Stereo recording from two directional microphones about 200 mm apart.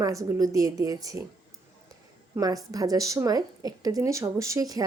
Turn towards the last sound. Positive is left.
turn(degrees=-20)  # may be behind; listen again after turning